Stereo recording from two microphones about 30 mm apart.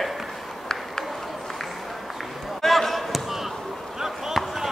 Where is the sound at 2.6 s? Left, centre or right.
Centre.